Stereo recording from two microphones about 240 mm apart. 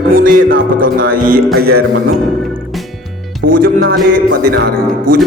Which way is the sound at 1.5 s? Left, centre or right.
Right.